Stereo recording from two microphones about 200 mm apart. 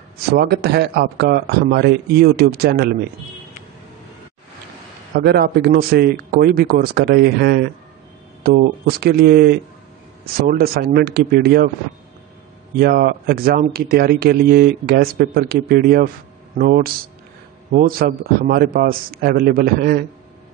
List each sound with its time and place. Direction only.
0.3 s speech: 50° right (ahead or behind)
5.1 s speech: 50° right (ahead or behind)
12.7 s speech: 50° right (ahead or behind)